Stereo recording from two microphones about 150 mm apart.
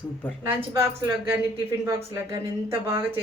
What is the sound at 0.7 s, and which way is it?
Speech, 15° right (ahead or behind).